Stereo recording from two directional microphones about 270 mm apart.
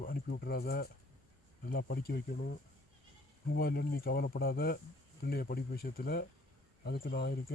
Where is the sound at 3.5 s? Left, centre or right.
Left.